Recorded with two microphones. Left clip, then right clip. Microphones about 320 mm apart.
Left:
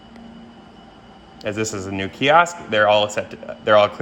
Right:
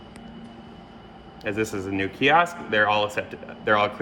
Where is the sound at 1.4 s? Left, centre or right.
Left.